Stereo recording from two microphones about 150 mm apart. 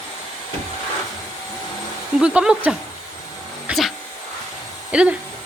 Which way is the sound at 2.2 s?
5° right (ahead or behind).